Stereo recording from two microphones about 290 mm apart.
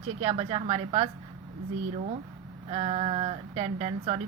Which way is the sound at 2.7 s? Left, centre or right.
Right.